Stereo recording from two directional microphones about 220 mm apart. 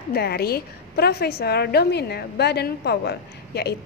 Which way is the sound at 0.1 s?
45° left (ahead or behind).